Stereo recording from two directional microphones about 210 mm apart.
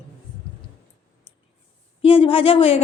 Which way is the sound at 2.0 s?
25° left (ahead or behind).